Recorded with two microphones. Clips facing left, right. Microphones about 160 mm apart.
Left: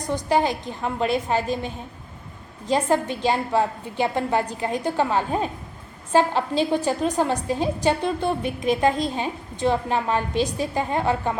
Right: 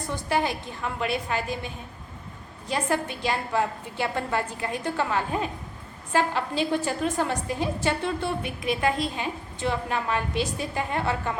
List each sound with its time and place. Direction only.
0.3 s a woman's voice: 20° left (ahead or behind)
2.7 s a woman's voice: 30° left (ahead or behind)
3.9 s a woman's voice: 20° left (ahead or behind)
6.7 s a woman's voice: 20° left (ahead or behind)